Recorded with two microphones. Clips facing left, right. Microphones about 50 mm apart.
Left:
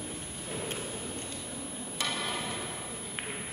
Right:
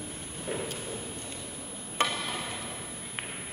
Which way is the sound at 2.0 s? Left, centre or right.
Right.